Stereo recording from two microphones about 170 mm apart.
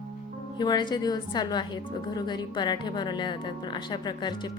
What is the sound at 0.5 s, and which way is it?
A woman's voice, 25° left (ahead or behind).